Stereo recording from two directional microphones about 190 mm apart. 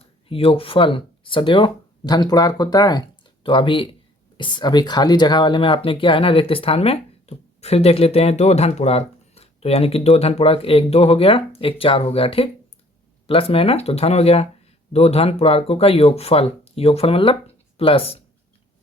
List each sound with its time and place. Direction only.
0.3 s speech: 30° left (ahead or behind)